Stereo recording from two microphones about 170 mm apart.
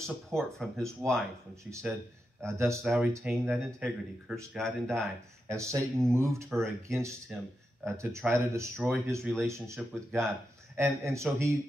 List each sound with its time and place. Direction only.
0.0 s speech: 5° left (ahead or behind)
2.4 s speech: 15° right (ahead or behind)
2.8 s speech: 5° right (ahead or behind)
5.5 s speech: 15° right (ahead or behind)